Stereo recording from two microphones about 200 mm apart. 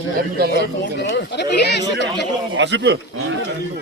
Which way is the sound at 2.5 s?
60° right (ahead or behind).